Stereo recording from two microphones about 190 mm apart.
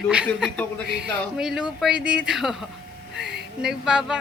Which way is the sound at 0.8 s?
5° right (ahead or behind).